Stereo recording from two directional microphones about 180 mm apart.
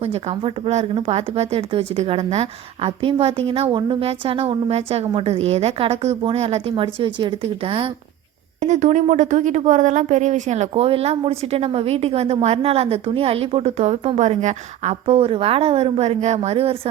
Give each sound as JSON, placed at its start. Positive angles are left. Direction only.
{"t": 0.0, "sound": "speech", "side_deg": -35}
{"t": 8.6, "sound": "speech", "side_deg": -40}